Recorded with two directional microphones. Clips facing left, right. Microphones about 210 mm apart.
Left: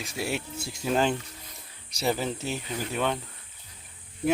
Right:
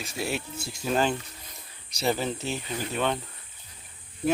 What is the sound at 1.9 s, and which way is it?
Speech, 10° left (ahead or behind).